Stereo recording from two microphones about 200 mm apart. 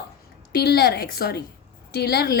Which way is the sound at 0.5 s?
55° left (ahead or behind).